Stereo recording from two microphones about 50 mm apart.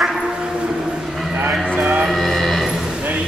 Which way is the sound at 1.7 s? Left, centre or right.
Right.